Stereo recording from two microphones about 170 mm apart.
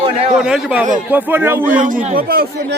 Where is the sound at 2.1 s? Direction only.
60° right (ahead or behind).